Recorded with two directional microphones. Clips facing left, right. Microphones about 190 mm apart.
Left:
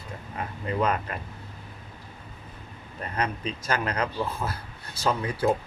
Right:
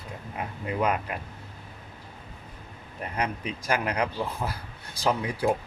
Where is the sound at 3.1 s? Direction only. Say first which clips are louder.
Left 1 dB; 10° right (ahead or behind).